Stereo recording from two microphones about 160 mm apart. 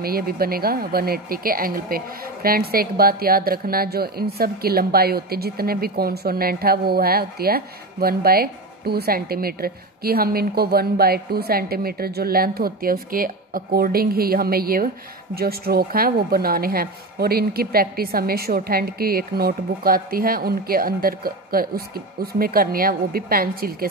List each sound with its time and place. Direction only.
0.0 s speech: 70° right (ahead or behind)